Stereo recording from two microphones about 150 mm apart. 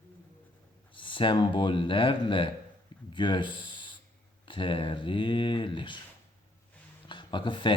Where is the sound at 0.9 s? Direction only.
35° left (ahead or behind).